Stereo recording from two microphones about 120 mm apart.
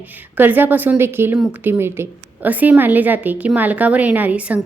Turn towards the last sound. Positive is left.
turn(degrees=-10)  # may be behind; listen again after turning